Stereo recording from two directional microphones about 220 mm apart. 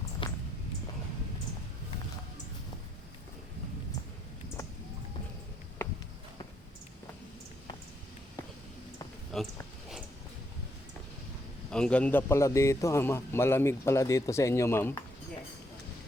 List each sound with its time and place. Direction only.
0.2 s music: 25° left (ahead or behind)
9.3 s speech: centre (ahead or behind)
11.7 s a man's voice: 5° left (ahead or behind)